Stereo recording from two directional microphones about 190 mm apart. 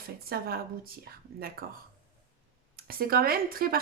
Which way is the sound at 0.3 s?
50° right (ahead or behind).